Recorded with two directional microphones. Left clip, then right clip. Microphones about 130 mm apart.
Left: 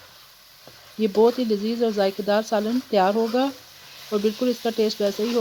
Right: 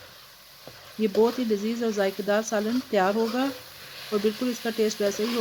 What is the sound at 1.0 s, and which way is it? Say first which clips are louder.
Speech: left 4 dB; 60° left (ahead or behind).